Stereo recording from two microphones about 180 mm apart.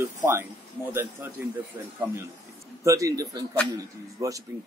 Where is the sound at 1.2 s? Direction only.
15° right (ahead or behind).